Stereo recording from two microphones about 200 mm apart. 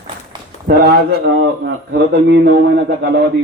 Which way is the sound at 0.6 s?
50° right (ahead or behind).